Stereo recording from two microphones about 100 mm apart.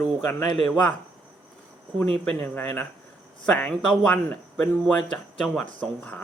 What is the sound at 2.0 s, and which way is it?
Speech, 10° left (ahead or behind).